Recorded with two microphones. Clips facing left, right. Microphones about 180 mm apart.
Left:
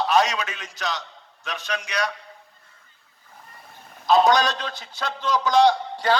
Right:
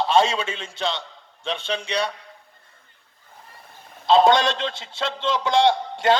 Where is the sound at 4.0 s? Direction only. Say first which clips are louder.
Right 2 dB; 25° right (ahead or behind).